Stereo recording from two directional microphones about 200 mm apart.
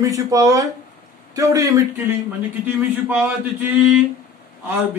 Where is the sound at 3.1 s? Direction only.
10° right (ahead or behind).